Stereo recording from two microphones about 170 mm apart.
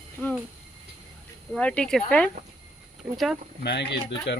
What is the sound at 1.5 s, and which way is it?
Speech, 5° left (ahead or behind).